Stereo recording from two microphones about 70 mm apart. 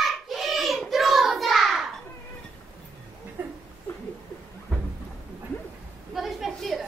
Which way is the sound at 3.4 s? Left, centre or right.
Right.